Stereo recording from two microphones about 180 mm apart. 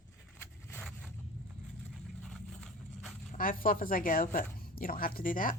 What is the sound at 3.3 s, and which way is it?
Speech, 50° left (ahead or behind).